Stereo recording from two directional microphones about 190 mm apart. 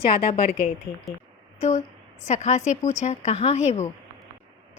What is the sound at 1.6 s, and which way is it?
A woman's voice, 40° left (ahead or behind).